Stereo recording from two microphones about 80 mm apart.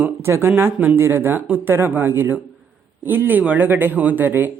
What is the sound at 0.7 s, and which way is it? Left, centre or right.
Speech, centre.